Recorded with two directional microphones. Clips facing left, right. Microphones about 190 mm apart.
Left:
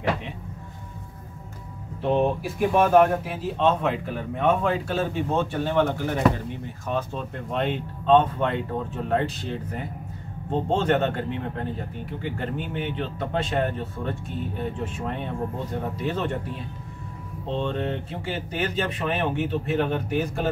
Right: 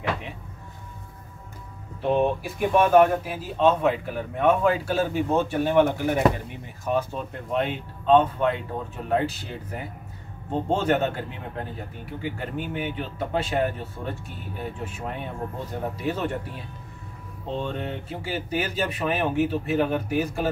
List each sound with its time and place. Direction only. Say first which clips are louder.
2.0 s speech: even; centre (ahead or behind)
17.5 s speech: left 3 dB; 5° right (ahead or behind)